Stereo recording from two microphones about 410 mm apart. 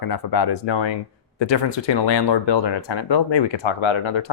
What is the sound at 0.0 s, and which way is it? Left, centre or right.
Speech, left.